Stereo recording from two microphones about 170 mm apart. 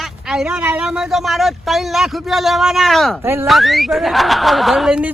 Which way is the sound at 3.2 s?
15° right (ahead or behind).